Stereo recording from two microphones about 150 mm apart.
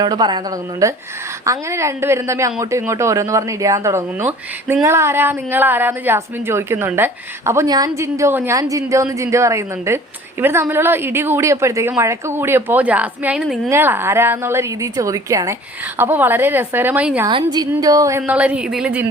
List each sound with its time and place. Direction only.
0.0 s a woman's voice: 30° right (ahead or behind); by 13.6 s 5° right (ahead or behind)
13.7 s a woman's voice: 15° right (ahead or behind)
17.2 s a woman's voice: 25° right (ahead or behind)
18.2 s a woman's voice: 10° right (ahead or behind)